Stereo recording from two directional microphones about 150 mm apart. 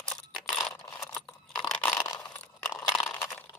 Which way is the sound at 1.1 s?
5° left (ahead or behind).